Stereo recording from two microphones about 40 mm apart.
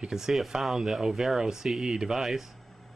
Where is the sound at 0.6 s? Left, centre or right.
Centre.